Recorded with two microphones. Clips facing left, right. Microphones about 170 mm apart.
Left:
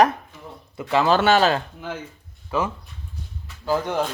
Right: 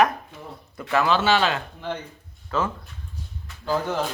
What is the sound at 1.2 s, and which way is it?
Speech, 45° left (ahead or behind).